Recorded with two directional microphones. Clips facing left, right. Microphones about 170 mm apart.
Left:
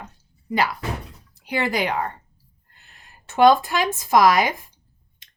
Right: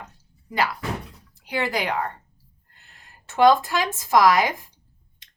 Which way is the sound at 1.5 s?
15° left (ahead or behind).